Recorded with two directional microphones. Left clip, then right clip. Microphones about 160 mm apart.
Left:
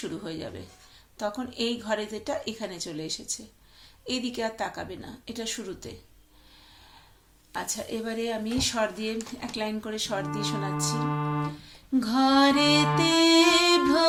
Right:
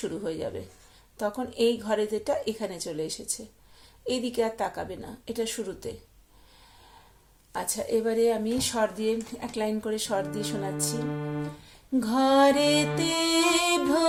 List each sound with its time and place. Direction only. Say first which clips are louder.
0.0 s speech: right 4 dB; 45° right (ahead or behind)
7.5 s speech: right 5 dB; 45° right (ahead or behind)
10.8 s speech: left 3 dB; centre (ahead or behind)
11.9 s speech: right 1 dB; 45° right (ahead or behind)
13.0 s music: left 5 dB; 45° right (ahead or behind)